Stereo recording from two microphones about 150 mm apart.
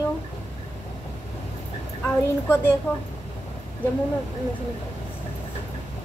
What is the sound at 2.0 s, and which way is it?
Child singing, 15° left (ahead or behind).